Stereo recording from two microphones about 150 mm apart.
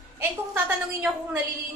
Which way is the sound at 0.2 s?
10° right (ahead or behind).